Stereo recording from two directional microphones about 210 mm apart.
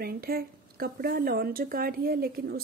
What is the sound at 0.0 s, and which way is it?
Speech, 45° right (ahead or behind).